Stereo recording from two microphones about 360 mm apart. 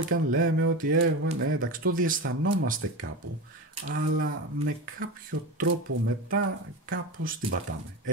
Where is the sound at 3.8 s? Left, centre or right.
Right.